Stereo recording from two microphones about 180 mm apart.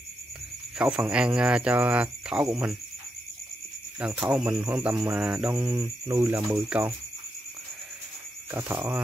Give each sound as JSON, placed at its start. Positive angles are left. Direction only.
{"t": 0.7, "sound": "speech", "side_deg": -5}
{"t": 4.0, "sound": "speech", "side_deg": -10}
{"t": 5.6, "sound": "speech", "side_deg": -20}
{"t": 8.5, "sound": "speech", "side_deg": -15}